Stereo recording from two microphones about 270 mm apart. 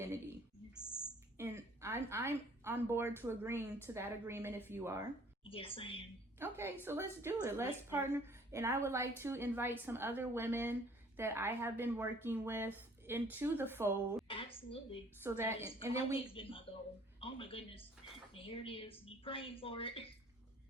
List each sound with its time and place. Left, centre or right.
1.4 s a woman's voice: centre
5.5 s a woman's voice: centre
6.4 s a woman's voice: centre
14.3 s a woman's voice: centre
15.2 s a woman's voice: centre
16.2 s a woman's voice: centre